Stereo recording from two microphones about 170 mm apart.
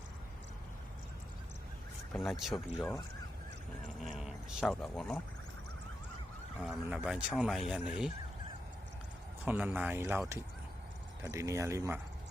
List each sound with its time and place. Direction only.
2.3 s speech: centre (ahead or behind)
4.0 s a sound: 5° right (ahead or behind)
4.6 s speech: 5° left (ahead or behind)
6.6 s speech: 5° right (ahead or behind)
9.5 s speech: 10° right (ahead or behind)
11.2 s speech: 15° right (ahead or behind)